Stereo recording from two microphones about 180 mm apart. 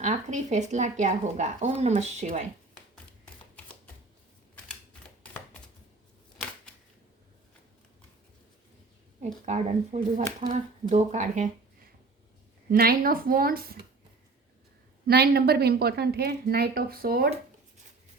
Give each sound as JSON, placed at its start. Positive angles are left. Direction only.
{"t": 0.0, "sound": "speech", "side_deg": -40}
{"t": 9.5, "sound": "speech", "side_deg": -40}
{"t": 12.7, "sound": "a woman's voice", "side_deg": -55}
{"t": 15.0, "sound": "a woman's voice", "side_deg": -60}